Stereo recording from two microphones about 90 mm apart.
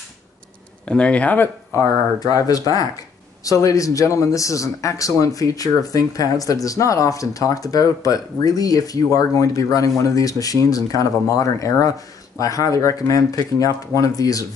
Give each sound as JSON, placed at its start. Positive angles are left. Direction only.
{"t": 0.8, "sound": "speech", "side_deg": 10}
{"t": 1.7, "sound": "a man's voice", "side_deg": 35}
{"t": 3.4, "sound": "a man's voice", "side_deg": 40}